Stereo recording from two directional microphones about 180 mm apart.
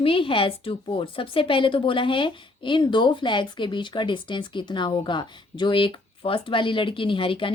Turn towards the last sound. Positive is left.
turn(degrees=30)  # may be behind; listen again after turning